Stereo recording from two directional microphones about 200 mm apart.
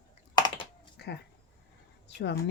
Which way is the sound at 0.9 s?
55° left (ahead or behind).